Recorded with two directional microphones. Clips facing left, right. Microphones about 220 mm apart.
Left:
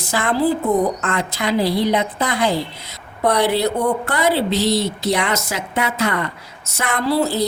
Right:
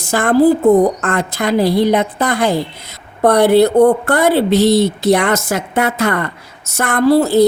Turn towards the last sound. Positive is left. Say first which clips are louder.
# right 8 dB
turn(degrees=-50)  # may be behind; listen again after turning